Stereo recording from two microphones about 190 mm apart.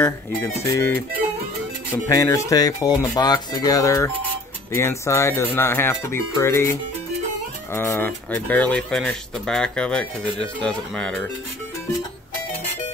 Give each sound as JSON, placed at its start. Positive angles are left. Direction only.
{"t": 0.7, "sound": "speech", "side_deg": 15}
{"t": 2.0, "sound": "speech", "side_deg": 15}